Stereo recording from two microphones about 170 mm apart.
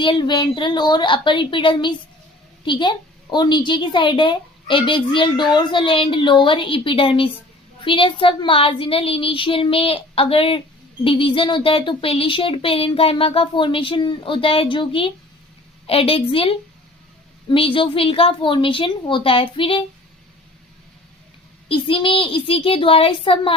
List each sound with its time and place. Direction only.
0.0 s a woman's voice: 25° left (ahead or behind)
21.7 s speech: 30° left (ahead or behind)